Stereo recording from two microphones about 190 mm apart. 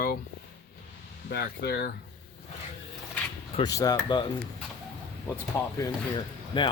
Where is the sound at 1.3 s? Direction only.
55° left (ahead or behind).